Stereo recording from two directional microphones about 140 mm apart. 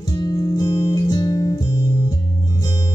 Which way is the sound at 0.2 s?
30° left (ahead or behind).